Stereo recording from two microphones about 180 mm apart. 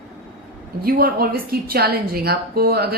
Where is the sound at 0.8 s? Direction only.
55° right (ahead or behind).